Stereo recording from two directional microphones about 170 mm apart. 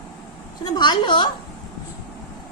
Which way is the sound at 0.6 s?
25° left (ahead or behind).